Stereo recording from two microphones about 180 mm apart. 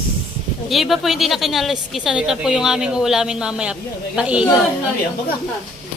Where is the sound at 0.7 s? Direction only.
Centre (ahead or behind).